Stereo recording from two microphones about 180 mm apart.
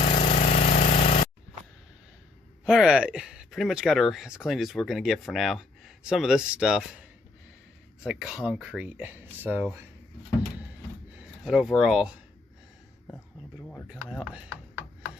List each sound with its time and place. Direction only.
0.2 s a sound: 40° left (ahead or behind)
2.6 s speech: 5° right (ahead or behind)
8.0 s speech: 5° right (ahead or behind)
11.2 s speech: centre (ahead or behind)
13.8 s speech: 5° right (ahead or behind)